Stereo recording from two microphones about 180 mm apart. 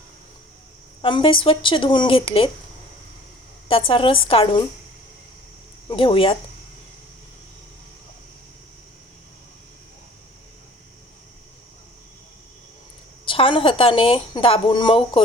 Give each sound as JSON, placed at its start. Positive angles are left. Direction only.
{"t": 1.0, "sound": "a woman's voice", "side_deg": 30}
{"t": 3.7, "sound": "a woman's voice", "side_deg": 30}
{"t": 5.9, "sound": "speech", "side_deg": 30}
{"t": 13.2, "sound": "a woman's voice", "side_deg": 30}